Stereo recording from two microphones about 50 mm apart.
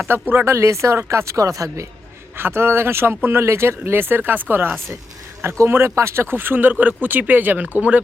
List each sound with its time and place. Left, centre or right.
0.1 s speech: right
2.3 s speech: right
5.4 s speech: right